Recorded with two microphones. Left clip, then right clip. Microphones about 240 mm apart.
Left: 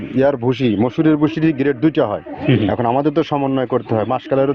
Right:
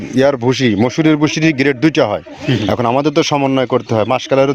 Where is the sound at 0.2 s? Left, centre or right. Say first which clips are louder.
Right 3 dB; right.